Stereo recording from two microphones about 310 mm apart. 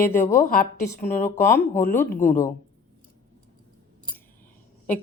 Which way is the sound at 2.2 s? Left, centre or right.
Left.